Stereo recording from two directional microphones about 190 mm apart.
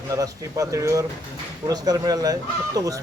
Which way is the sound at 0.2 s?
15° right (ahead or behind).